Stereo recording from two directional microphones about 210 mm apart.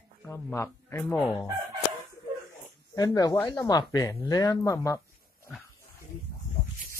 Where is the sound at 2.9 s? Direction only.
15° left (ahead or behind).